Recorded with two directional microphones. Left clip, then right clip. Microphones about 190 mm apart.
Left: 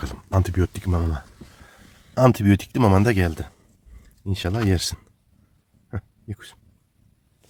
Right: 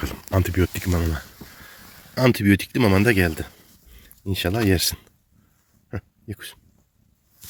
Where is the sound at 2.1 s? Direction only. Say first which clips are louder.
Left 1 dB; 25° left (ahead or behind).